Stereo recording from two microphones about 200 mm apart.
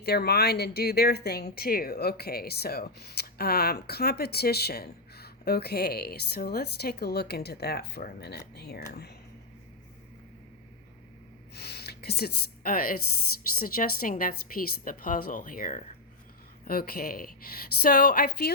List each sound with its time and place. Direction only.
0.0 s speech: 50° left (ahead or behind)
11.5 s a sound: 55° left (ahead or behind)
13.6 s speech: 45° left (ahead or behind)